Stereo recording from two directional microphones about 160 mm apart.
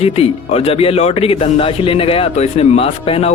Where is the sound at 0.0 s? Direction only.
40° left (ahead or behind).